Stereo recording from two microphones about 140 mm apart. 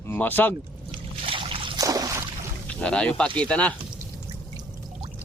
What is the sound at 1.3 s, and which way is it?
Trickle, 40° right (ahead or behind).